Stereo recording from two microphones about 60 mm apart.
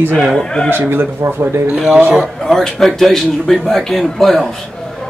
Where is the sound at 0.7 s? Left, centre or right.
Right.